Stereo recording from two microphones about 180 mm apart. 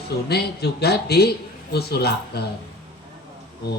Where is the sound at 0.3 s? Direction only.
65° left (ahead or behind).